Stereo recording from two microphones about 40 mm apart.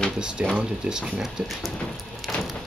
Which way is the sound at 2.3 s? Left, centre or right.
Left.